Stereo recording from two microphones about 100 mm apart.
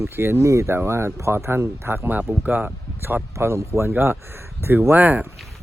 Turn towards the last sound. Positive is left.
turn(degrees=-15)  # may be behind; listen again after turning